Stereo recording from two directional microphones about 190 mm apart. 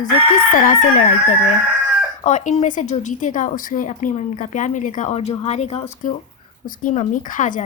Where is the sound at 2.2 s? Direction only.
40° left (ahead or behind).